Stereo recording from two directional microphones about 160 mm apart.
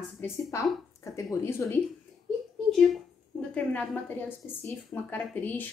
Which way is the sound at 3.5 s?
10° left (ahead or behind).